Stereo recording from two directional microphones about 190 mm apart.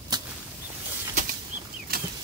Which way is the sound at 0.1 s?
20° right (ahead or behind).